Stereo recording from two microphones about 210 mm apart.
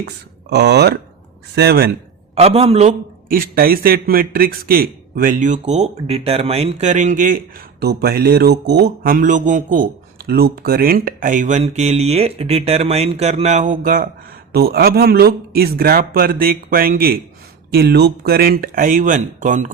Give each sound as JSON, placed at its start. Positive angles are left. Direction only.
{"t": 0.5, "sound": "a man's voice", "side_deg": -50}
{"t": 2.3, "sound": "a man's voice", "side_deg": -30}
{"t": 3.2, "sound": "a man's voice", "side_deg": -45}
{"t": 7.8, "sound": "a man's voice", "side_deg": -50}